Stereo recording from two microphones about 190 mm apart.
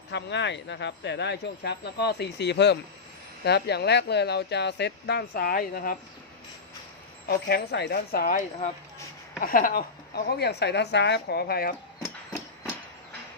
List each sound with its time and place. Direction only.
0.1 s speech: 65° left (ahead or behind); by 6.0 s 50° left (ahead or behind)
7.3 s speech: 60° left (ahead or behind)